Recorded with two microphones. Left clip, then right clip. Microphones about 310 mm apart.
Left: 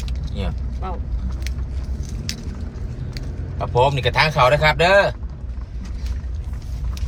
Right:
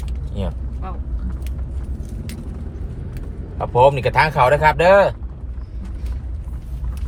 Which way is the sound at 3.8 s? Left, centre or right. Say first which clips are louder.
Right 3 dB; right.